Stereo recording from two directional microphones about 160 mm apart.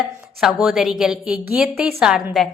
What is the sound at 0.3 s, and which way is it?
A woman's voice, 5° right (ahead or behind).